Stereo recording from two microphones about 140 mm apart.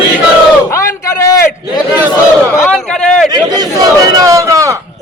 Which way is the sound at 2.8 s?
5° left (ahead or behind).